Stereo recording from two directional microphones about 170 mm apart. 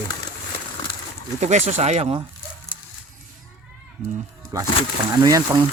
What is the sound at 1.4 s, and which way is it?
Speech, 45° right (ahead or behind).